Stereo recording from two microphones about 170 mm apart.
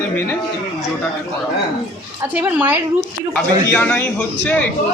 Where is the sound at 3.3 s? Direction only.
10° left (ahead or behind).